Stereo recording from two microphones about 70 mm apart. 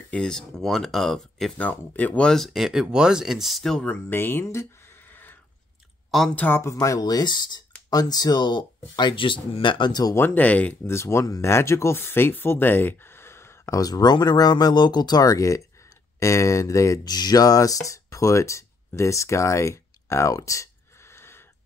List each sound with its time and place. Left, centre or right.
0.1 s speech: centre
1.6 s speech: left
2.2 s speech: centre
3.8 s speech: left
6.6 s speech: left
7.9 s speech: left
10.1 s speech: left
10.4 s speech: left
10.8 s speech: left
11.2 s speech: left
11.5 s speech: left
13.7 s speech: left
17.0 s speech: left